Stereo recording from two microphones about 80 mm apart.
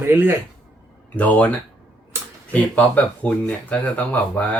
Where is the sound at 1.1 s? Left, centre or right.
Centre.